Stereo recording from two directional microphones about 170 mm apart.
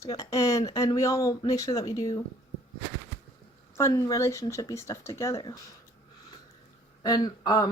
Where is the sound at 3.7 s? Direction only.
20° left (ahead or behind).